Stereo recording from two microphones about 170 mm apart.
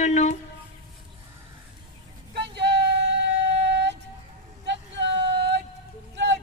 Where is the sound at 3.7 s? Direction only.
90° right.